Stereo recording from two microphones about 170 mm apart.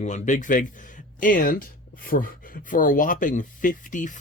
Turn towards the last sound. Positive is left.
turn(degrees=50)  # may be behind; listen again after turning